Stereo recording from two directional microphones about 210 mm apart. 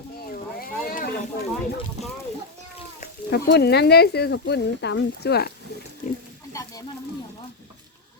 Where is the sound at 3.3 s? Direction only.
50° left (ahead or behind).